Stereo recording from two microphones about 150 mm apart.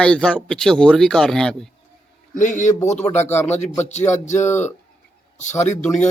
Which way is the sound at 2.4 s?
55° left (ahead or behind).